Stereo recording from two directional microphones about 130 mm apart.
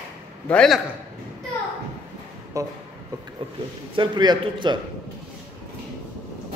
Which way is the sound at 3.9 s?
35° right (ahead or behind).